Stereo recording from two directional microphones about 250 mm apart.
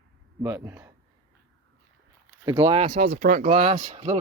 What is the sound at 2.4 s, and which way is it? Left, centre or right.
Speech, right.